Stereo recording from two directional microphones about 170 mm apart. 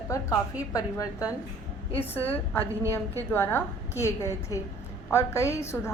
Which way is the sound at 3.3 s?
15° left (ahead or behind).